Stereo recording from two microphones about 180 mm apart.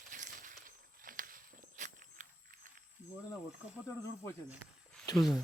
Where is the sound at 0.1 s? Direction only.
45° right (ahead or behind).